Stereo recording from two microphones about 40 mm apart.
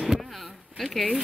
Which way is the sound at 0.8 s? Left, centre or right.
Centre.